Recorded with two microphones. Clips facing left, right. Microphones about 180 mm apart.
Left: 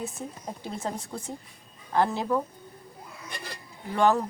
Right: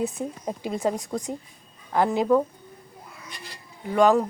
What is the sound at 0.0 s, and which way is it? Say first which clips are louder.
Speech: right 7 dB; 15° right (ahead or behind).